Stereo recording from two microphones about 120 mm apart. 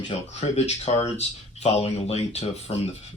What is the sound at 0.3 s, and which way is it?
Speech, 65° left (ahead or behind).